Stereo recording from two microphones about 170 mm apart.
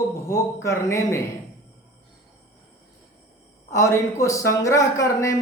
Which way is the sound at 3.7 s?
15° left (ahead or behind).